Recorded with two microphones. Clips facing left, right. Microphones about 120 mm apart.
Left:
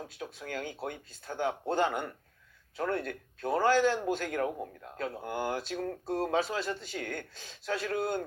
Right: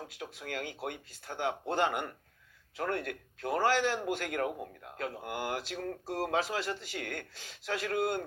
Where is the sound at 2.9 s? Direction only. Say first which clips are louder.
Left 2 dB; 30° left (ahead or behind).